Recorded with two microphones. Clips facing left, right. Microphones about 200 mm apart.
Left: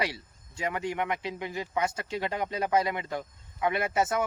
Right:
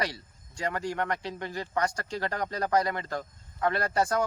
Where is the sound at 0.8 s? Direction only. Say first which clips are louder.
Left 1 dB; 20° left (ahead or behind).